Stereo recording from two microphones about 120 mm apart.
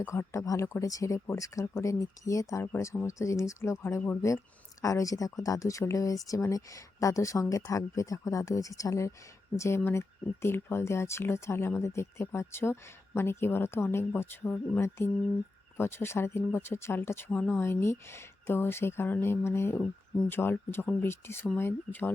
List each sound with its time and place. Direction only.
0.0 s speech: 25° left (ahead or behind)